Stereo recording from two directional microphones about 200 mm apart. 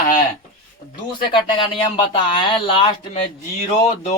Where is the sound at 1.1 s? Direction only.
25° left (ahead or behind).